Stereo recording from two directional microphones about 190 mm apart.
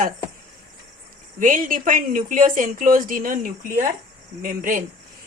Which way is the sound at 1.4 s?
45° right (ahead or behind).